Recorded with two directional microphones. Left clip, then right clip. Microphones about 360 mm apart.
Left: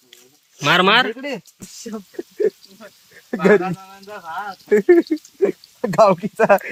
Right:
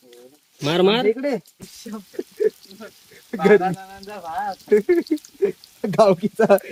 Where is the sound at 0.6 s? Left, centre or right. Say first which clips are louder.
Left 4 dB; centre.